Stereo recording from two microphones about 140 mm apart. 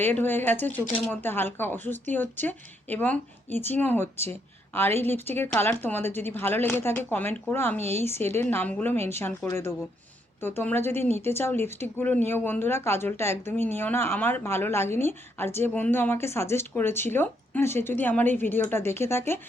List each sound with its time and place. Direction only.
0.0 s speech: 15° left (ahead or behind)